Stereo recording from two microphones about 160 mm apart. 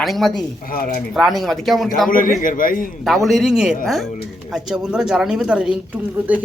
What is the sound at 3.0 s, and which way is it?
A man's voice, centre (ahead or behind).